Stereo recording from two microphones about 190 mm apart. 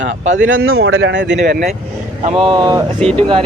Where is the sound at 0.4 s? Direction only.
90° right; by 1.5 s 65° right (ahead or behind).